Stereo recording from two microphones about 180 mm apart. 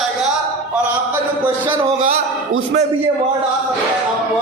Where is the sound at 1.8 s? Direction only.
40° right (ahead or behind).